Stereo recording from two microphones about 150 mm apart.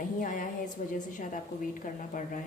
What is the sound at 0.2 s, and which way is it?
A woman's voice, 65° left (ahead or behind).